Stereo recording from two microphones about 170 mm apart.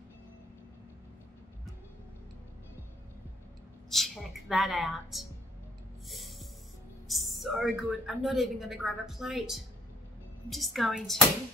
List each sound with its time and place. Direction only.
3.9 s a woman's voice: centre (ahead or behind)
6.0 s snort: centre (ahead or behind)
7.1 s a woman's voice: centre (ahead or behind)